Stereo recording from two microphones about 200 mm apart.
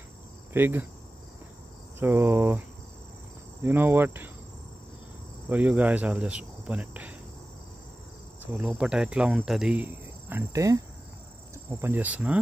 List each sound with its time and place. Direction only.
0.5 s cricket: 10° right (ahead or behind)
2.0 s cricket: 10° right (ahead or behind)
3.6 s cricket: 10° right (ahead or behind)
5.5 s cricket: 5° right (ahead or behind)
8.5 s cricket: centre (ahead or behind)
10.3 s cricket: 15° right (ahead or behind)